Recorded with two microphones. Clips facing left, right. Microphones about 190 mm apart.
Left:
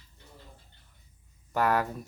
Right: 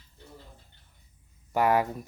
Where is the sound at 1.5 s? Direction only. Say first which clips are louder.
Right 3 dB; 15° right (ahead or behind).